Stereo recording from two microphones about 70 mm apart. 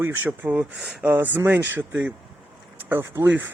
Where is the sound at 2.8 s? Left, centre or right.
Right.